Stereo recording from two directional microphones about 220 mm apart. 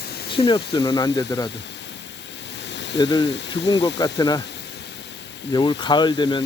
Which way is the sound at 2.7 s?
55° left (ahead or behind).